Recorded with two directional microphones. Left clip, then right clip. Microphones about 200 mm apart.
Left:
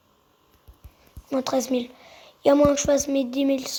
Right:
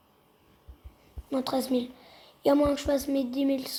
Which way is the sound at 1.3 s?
30° left (ahead or behind).